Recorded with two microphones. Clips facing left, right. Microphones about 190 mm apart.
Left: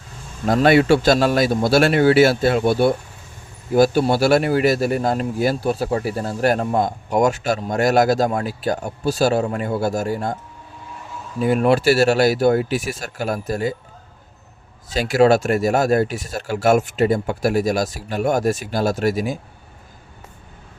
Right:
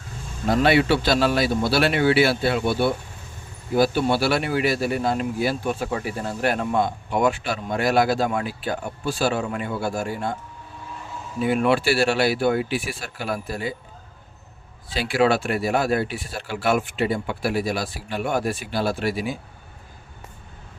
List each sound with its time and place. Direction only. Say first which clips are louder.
0.5 s speech: left 4 dB; 45° left (ahead or behind)
11.3 s speech: left 4 dB; 40° left (ahead or behind)
14.8 s speech: left 5 dB; 45° left (ahead or behind)